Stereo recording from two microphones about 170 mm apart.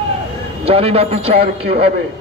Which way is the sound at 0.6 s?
35° right (ahead or behind).